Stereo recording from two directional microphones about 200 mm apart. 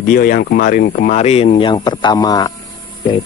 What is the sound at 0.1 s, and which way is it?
Speech, 45° left (ahead or behind).